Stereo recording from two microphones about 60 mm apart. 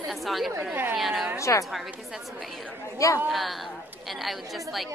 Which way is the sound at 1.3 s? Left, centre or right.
Left.